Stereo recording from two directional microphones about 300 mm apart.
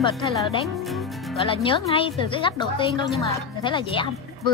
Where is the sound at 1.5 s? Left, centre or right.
Centre.